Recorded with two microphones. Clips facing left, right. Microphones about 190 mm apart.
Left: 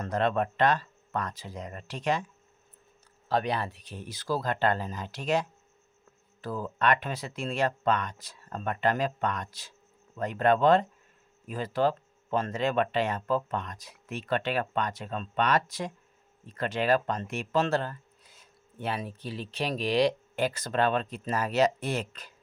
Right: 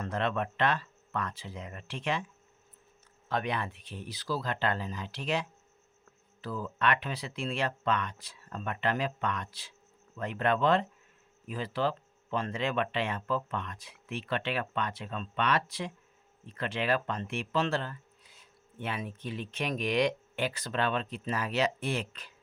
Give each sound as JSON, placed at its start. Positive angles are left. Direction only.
{"t": 0.0, "sound": "speech", "side_deg": 40}
{"t": 3.2, "sound": "speech", "side_deg": 35}